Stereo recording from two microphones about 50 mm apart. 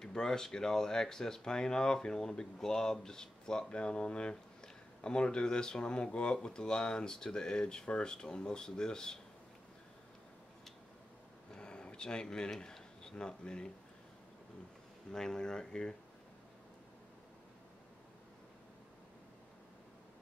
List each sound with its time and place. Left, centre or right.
0.0 s speech: centre
11.5 s a sound: centre
15.0 s speech: centre